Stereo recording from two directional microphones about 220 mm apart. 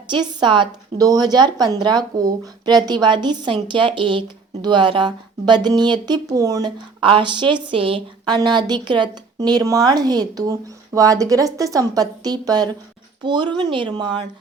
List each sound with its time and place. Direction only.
0.1 s a woman's voice: 20° right (ahead or behind)